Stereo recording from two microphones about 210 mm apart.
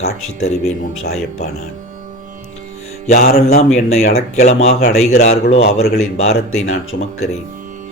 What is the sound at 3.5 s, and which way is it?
Speech, 30° left (ahead or behind).